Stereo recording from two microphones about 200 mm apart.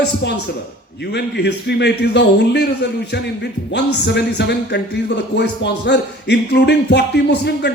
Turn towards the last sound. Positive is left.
turn(degrees=55)  # may be behind; listen again after turning